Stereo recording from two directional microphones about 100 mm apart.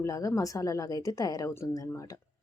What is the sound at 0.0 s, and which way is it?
Speech, 35° left (ahead or behind).